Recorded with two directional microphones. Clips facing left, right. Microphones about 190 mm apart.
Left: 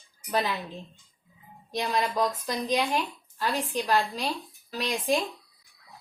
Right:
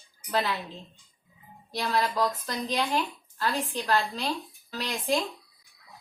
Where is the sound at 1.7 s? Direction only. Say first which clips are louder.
Even; 15° left (ahead or behind).